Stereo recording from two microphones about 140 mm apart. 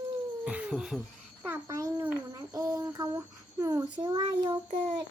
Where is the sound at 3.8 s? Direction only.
35° right (ahead or behind).